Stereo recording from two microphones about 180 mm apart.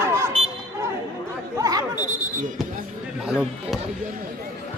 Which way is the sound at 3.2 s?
5° right (ahead or behind).